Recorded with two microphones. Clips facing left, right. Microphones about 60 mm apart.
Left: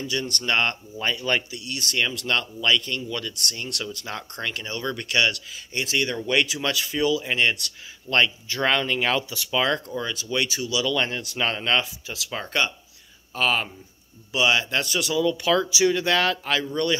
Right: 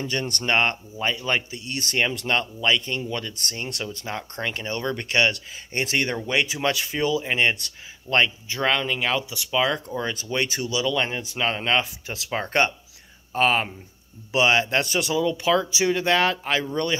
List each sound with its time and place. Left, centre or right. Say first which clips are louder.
0.0 s speech: right 1 dB; right
0.5 s speech: right 2 dB; right
1.5 s speech: right 1 dB; right
6.1 s speech: left 1 dB; centre
6.4 s speech: right 2 dB; right
7.2 s speech: right 1 dB; right
8.6 s speech: left 1 dB; centre
9.9 s speech: right 1 dB; right
11.0 s speech: even; centre
12.3 s speech: right 4 dB; right